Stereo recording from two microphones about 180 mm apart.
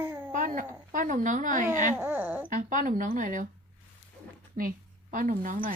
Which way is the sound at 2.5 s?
45° right (ahead or behind).